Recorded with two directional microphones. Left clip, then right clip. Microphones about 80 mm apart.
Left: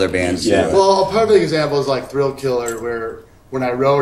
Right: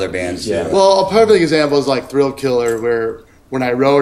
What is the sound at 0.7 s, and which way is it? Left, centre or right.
Speech, right.